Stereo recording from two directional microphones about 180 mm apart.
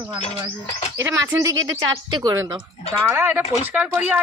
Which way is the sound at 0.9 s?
15° right (ahead or behind).